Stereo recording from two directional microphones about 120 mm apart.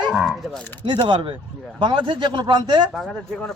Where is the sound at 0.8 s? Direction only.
40° right (ahead or behind).